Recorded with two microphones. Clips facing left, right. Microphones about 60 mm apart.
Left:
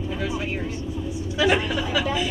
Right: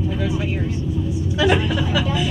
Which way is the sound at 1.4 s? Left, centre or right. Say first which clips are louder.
Right 2 dB; centre.